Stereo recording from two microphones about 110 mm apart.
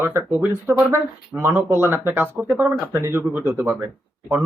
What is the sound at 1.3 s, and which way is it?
Speech, 20° right (ahead or behind).